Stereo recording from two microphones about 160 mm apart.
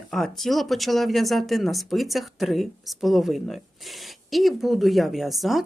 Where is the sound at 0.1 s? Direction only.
Centre (ahead or behind).